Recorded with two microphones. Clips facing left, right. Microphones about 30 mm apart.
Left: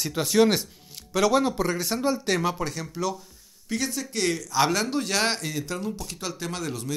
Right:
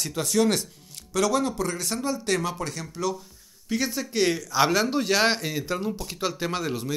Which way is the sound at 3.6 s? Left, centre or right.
Centre.